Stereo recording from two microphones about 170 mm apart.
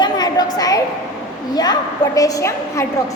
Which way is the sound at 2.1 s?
20° left (ahead or behind).